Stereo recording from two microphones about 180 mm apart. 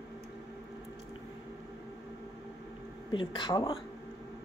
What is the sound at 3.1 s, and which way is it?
Speech, 25° left (ahead or behind).